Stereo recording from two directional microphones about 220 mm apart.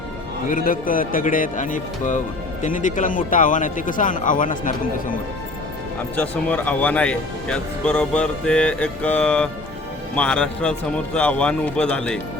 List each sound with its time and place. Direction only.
0.4 s a man's voice: 40° left (ahead or behind)
6.1 s speech: 5° left (ahead or behind)